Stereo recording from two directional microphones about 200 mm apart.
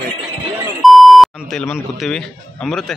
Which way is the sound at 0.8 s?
Centre (ahead or behind).